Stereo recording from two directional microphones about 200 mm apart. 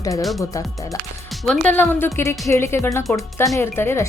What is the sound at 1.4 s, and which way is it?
Speech, 5° left (ahead or behind).